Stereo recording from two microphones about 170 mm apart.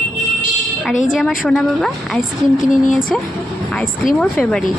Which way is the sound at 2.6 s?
50° left (ahead or behind).